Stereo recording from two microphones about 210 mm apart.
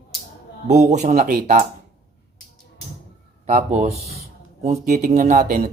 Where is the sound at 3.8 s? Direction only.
30° right (ahead or behind).